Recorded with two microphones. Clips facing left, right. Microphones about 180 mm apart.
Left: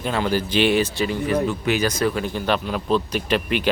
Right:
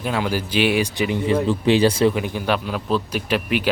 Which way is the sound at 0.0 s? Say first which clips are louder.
Left 1 dB; 5° right (ahead or behind).